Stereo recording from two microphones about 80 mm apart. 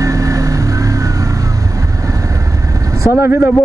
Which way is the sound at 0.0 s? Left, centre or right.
Right.